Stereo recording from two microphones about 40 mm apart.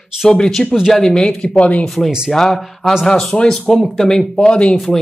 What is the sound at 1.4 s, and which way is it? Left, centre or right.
Speech, left.